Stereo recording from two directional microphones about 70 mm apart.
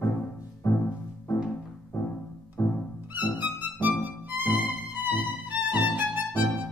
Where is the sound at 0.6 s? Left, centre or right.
Left.